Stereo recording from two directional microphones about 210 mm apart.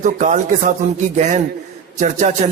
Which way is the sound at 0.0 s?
35° right (ahead or behind).